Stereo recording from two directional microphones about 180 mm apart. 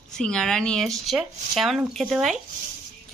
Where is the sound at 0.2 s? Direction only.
5° left (ahead or behind).